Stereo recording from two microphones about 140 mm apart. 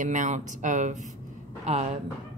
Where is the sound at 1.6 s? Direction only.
50° right (ahead or behind).